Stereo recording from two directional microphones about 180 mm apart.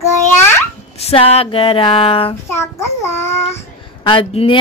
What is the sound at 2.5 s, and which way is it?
Child singing, 15° left (ahead or behind).